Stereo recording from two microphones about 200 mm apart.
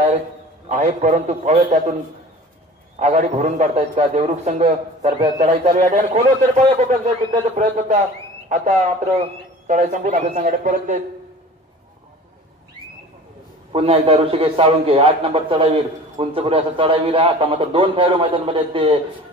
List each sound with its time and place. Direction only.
0.7 s a man's voice: 35° right (ahead or behind)
3.0 s a man's voice: 35° right (ahead or behind)
13.7 s a man's voice: 30° right (ahead or behind)